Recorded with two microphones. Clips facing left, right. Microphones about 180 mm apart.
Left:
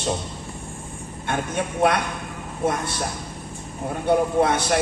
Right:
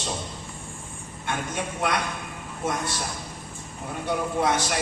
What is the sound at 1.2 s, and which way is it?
A man's voice, 55° left (ahead or behind).